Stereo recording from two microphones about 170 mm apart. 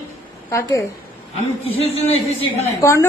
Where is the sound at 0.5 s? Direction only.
20° left (ahead or behind).